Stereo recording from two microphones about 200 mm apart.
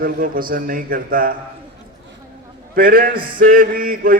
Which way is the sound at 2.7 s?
45° right (ahead or behind).